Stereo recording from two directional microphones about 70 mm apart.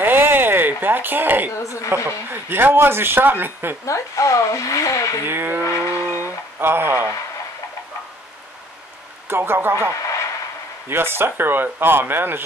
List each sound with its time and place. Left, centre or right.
0.0 s a sound: right
1.6 s speech: left
2.0 s a man's voice: right
3.8 s speech: left
5.2 s a man's voice: right
5.6 s vehicle: left
6.6 s a man's voice: right
9.3 s a man's voice: right
10.9 s a man's voice: right